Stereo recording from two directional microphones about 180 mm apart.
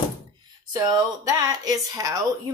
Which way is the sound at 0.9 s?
20° right (ahead or behind).